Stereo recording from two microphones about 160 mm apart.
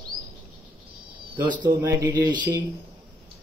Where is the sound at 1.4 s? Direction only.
30° right (ahead or behind).